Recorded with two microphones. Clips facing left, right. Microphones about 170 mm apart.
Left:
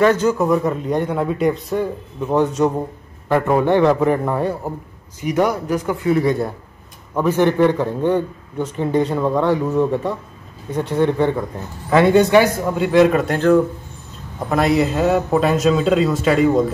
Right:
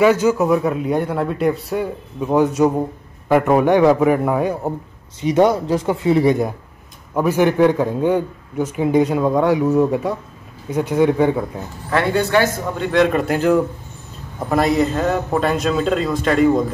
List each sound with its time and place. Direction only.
0.0 s a man's voice: 10° right (ahead or behind)
5.2 s a man's voice: 20° right (ahead or behind)
11.9 s a man's voice: 20° left (ahead or behind); by 16.6 s centre (ahead or behind)